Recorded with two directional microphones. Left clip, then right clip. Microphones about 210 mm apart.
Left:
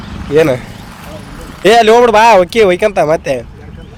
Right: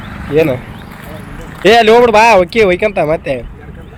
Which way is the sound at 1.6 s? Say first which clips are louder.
Even; 10° left (ahead or behind).